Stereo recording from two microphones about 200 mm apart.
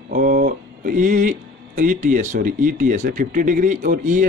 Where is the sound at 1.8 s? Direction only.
40° right (ahead or behind).